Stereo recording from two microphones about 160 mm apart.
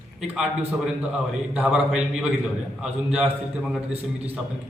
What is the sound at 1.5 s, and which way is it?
A man's voice, 5° right (ahead or behind).